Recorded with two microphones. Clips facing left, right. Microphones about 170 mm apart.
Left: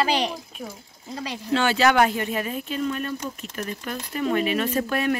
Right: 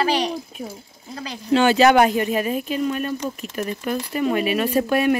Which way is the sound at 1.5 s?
15° right (ahead or behind).